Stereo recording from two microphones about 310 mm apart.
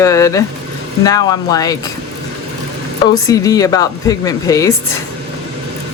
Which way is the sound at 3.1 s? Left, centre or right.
Centre.